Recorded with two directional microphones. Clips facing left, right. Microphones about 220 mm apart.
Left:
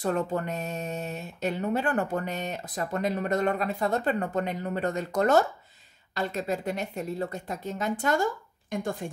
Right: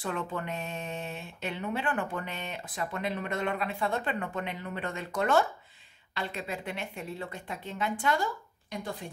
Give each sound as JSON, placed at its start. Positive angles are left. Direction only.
{"t": 0.0, "sound": "a woman's voice", "side_deg": 40}